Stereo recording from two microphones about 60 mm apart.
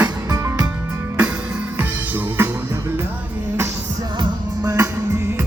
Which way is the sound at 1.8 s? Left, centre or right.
Right.